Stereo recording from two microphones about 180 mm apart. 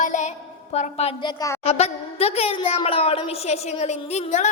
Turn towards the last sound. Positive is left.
turn(degrees=40)  # may be behind; listen again after turning